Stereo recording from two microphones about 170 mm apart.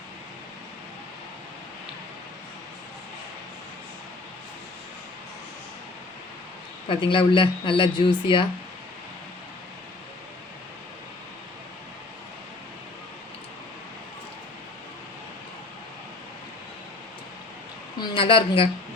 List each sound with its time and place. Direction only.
6.8 s speech: 30° left (ahead or behind)
18.0 s a woman's voice: 30° left (ahead or behind)